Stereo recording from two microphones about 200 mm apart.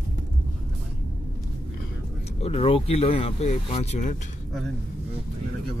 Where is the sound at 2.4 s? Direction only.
30° left (ahead or behind).